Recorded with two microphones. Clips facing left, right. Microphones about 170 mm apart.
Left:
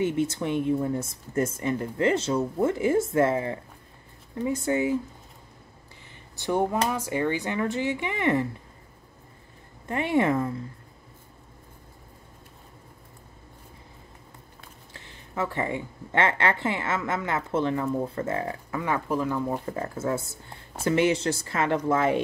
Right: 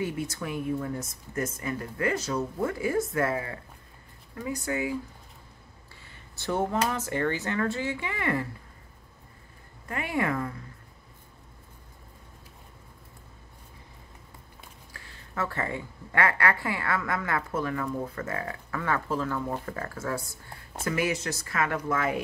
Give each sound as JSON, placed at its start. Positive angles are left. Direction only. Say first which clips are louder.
{"t": 0.0, "sound": "a woman's voice", "louder": "left 6 dB", "side_deg": 25}
{"t": 6.3, "sound": "speech", "louder": "left 3 dB", "side_deg": 15}
{"t": 9.8, "sound": "a woman's voice", "louder": "left 6 dB", "side_deg": 25}
{"t": 14.9, "sound": "a woman's voice", "louder": "left 2 dB", "side_deg": 20}